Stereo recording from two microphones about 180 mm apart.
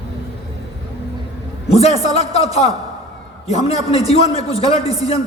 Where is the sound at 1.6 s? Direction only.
35° left (ahead or behind).